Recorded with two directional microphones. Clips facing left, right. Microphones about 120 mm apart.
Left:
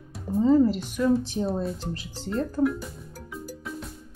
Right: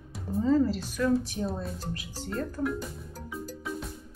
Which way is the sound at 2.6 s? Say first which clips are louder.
Left 8 dB; 5° left (ahead or behind).